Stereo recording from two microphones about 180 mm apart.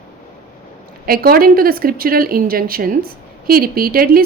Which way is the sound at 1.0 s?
55° right (ahead or behind).